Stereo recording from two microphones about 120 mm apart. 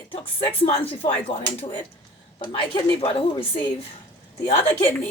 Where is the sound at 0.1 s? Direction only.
50° left (ahead or behind).